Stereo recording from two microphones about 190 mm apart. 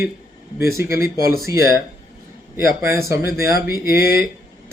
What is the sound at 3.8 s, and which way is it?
Speech, 55° left (ahead or behind).